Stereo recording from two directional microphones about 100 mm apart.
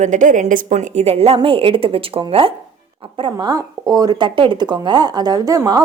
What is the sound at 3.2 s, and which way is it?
Speech, 45° right (ahead or behind).